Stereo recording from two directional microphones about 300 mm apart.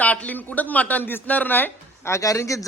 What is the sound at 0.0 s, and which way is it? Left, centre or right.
A man's voice, centre.